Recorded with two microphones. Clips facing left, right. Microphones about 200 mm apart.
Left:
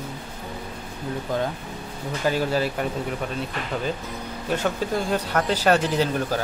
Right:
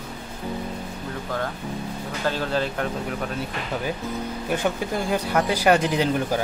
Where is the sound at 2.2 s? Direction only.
10° left (ahead or behind).